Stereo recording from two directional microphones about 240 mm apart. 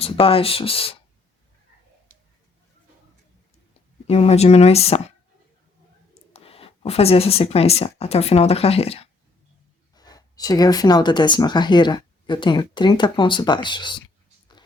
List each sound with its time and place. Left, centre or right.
0.0 s speech: left
4.0 s speech: left
6.3 s speech: left